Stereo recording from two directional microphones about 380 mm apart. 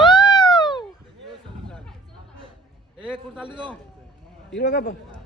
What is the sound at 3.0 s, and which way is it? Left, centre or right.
Music, centre.